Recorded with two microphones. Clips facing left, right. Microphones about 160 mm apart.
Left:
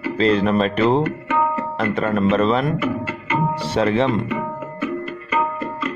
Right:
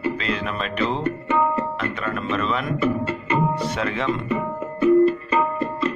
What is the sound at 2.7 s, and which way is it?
Speech, 30° right (ahead or behind).